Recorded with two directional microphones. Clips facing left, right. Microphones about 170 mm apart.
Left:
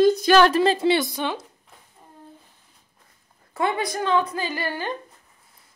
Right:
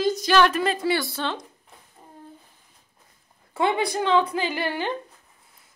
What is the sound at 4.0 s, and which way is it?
Female singing, 20° right (ahead or behind).